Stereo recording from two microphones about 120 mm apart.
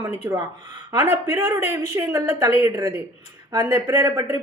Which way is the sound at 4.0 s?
20° right (ahead or behind).